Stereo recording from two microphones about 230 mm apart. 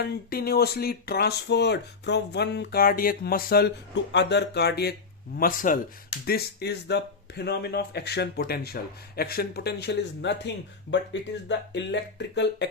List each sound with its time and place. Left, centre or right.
0.0 s speech: left